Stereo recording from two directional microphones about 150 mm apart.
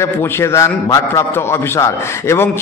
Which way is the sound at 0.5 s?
20° left (ahead or behind).